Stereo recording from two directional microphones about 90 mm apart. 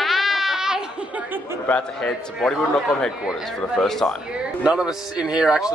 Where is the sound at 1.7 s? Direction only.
10° left (ahead or behind).